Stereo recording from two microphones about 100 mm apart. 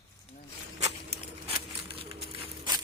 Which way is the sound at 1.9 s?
70° right (ahead or behind).